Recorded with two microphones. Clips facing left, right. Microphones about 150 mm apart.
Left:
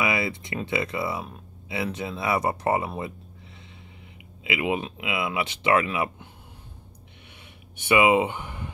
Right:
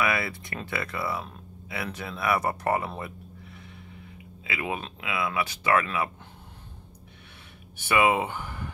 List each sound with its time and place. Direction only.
0.0 s speech: 20° left (ahead or behind)
4.5 s speech: 20° left (ahead or behind)
7.7 s speech: 20° left (ahead or behind)